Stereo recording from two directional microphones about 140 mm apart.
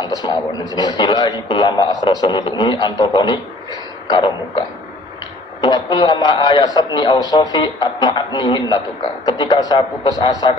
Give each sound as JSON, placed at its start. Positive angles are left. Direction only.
{"t": 0.2, "sound": "a man's voice", "side_deg": 30}
{"t": 5.6, "sound": "a man's voice", "side_deg": 30}